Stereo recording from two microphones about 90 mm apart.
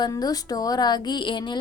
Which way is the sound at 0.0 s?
45° left (ahead or behind).